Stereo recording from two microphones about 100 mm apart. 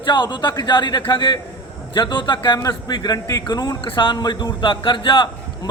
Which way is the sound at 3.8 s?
55° left (ahead or behind).